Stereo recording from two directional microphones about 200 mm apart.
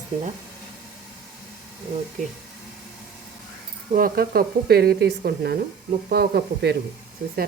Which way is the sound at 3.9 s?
50° right (ahead or behind).